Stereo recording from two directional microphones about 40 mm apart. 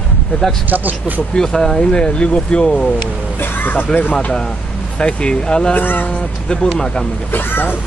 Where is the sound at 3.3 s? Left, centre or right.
Left.